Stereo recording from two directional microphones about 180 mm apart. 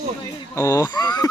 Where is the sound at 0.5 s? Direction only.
20° left (ahead or behind).